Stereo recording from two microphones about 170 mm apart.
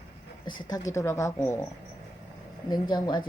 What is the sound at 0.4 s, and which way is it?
Speech, 25° left (ahead or behind).